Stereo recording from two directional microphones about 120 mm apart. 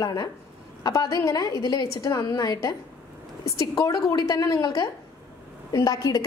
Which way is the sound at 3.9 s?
30° left (ahead or behind).